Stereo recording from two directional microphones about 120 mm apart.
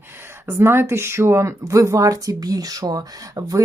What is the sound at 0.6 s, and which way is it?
Speech, 20° right (ahead or behind).